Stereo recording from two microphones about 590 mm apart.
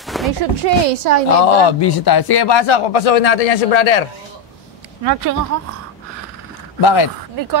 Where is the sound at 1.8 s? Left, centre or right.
Left.